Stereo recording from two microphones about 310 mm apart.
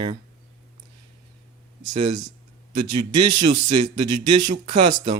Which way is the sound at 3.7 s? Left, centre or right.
Centre.